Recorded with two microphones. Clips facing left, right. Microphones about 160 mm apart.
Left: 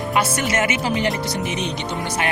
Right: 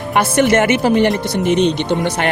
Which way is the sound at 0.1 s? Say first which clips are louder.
Right 9 dB; 60° right (ahead or behind).